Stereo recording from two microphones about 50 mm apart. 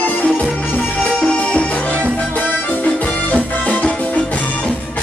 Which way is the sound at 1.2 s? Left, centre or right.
Left.